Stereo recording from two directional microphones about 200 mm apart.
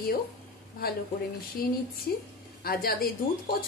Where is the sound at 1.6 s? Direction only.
45° left (ahead or behind).